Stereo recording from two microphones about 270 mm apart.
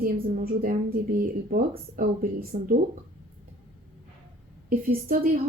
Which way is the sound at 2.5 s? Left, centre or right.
Right.